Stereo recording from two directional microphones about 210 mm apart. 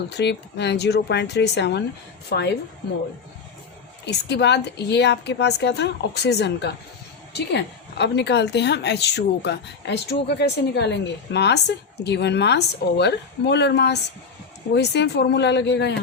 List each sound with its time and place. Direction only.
0.1 s a woman's voice: 55° left (ahead or behind)
4.0 s a woman's voice: 55° left (ahead or behind)